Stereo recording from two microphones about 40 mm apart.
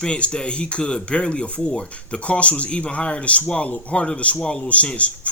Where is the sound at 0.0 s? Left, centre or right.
Left.